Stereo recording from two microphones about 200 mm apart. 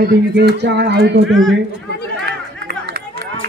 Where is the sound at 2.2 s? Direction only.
55° right (ahead or behind).